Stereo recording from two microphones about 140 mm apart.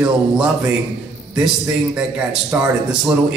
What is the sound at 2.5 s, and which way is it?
Speech, 15° right (ahead or behind).